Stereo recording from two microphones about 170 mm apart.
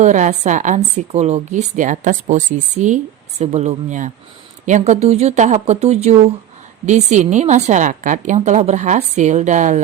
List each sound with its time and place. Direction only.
0.0 s a woman's voice: 45° right (ahead or behind)